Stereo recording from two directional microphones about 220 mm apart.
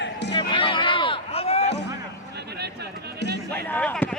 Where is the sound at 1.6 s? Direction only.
50° left (ahead or behind).